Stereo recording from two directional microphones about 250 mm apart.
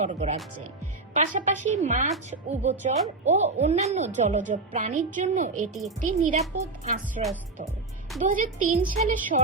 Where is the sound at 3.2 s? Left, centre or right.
Right.